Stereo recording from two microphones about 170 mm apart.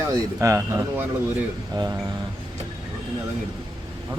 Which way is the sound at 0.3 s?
20° right (ahead or behind).